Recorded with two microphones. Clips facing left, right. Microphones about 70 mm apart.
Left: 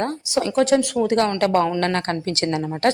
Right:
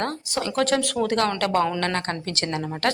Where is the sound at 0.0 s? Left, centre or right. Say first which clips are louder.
Left 4 dB; centre.